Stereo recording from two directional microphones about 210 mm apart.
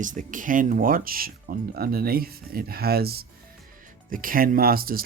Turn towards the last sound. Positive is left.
turn(degrees=-45)  # may be behind; listen again after turning